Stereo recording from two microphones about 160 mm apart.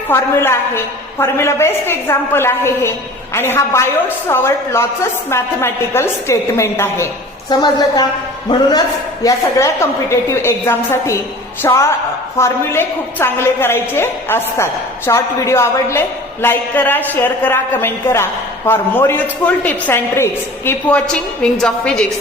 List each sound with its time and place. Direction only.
0.1 s a woman's voice: 15° left (ahead or behind)
7.5 s a woman's voice: 25° left (ahead or behind); by 22.0 s 5° left (ahead or behind)